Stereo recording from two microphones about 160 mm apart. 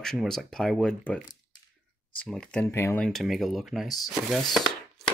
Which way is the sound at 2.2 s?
5° left (ahead or behind).